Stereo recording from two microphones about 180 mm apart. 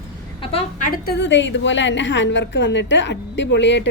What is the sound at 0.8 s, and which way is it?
A woman's voice, 50° left (ahead or behind).